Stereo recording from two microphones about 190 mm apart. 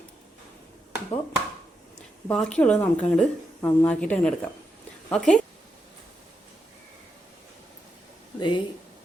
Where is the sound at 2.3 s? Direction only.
5° left (ahead or behind).